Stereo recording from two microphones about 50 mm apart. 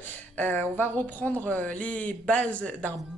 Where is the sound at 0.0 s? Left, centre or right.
Left.